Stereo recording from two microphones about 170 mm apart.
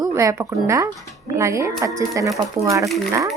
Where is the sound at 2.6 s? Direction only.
35° right (ahead or behind).